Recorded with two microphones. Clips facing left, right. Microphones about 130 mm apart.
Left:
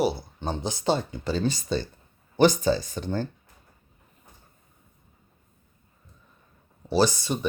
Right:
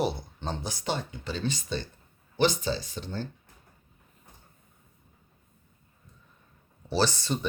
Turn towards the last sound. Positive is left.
turn(degrees=15)  # may be behind; listen again after turning